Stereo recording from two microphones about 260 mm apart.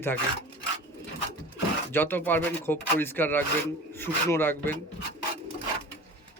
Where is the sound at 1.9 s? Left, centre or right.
Centre.